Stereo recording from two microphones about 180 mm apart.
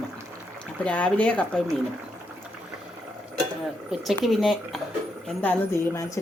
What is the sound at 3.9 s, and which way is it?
Speech, centre (ahead or behind).